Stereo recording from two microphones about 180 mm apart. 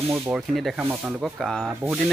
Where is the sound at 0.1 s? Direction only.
Centre (ahead or behind).